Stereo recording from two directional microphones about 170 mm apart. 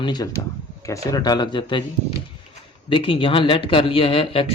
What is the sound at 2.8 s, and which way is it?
Speech, 30° left (ahead or behind).